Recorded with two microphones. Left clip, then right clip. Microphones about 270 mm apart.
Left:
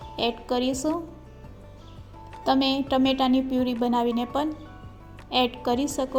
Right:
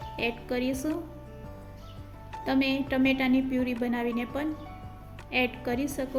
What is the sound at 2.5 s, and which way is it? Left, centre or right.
Speech, centre.